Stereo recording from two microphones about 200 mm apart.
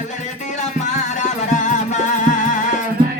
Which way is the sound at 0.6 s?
40° left (ahead or behind).